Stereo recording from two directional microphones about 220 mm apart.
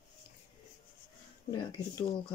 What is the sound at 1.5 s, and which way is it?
Speech, 15° left (ahead or behind).